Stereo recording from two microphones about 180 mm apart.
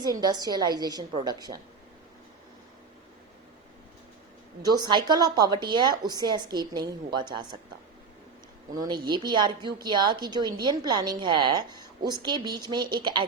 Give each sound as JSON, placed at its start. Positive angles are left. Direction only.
{"t": 0.0, "sound": "a woman's voice", "side_deg": -20}
{"t": 4.6, "sound": "a woman's voice", "side_deg": -20}
{"t": 8.7, "sound": "a woman's voice", "side_deg": -20}